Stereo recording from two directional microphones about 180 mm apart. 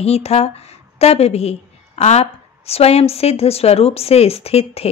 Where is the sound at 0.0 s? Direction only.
35° left (ahead or behind).